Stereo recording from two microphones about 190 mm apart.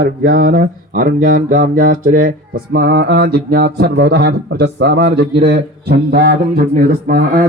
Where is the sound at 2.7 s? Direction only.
60° right (ahead or behind).